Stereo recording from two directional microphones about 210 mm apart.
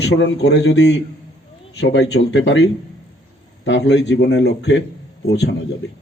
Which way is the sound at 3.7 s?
55° left (ahead or behind).